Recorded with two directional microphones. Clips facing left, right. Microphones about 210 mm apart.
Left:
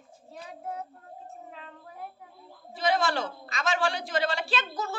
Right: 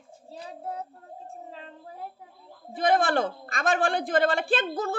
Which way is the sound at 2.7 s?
55° right (ahead or behind).